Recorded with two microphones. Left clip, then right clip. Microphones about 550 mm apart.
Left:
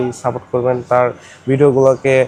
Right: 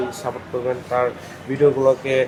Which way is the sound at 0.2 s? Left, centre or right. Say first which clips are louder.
Left 10 dB; left.